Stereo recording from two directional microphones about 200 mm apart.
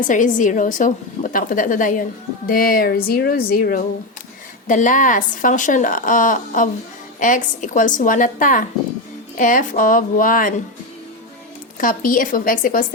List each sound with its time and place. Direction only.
0.1 s a woman's voice: 40° left (ahead or behind)
11.8 s speech: 45° left (ahead or behind)